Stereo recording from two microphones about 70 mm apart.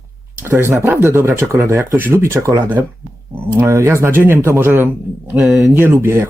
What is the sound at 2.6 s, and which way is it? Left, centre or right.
Speech, right.